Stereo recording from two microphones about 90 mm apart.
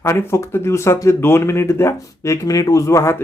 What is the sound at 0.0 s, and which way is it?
Speech, 30° left (ahead or behind).